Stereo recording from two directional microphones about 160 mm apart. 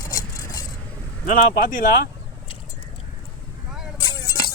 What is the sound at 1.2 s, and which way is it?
Speech, 55° left (ahead or behind).